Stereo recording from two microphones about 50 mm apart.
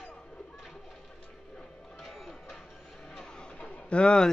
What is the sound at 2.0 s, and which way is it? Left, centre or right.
Music, centre.